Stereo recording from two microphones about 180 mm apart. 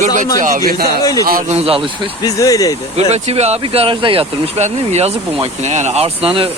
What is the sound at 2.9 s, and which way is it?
Speech, 35° right (ahead or behind).